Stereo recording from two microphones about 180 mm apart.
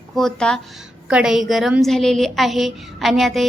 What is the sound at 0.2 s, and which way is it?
A woman's voice, 5° left (ahead or behind).